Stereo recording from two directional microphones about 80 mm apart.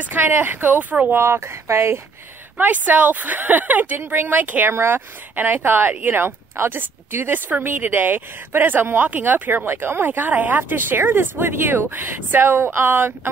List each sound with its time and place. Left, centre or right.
0.0 s speech: right
1.2 s speech: right
2.5 s speech: centre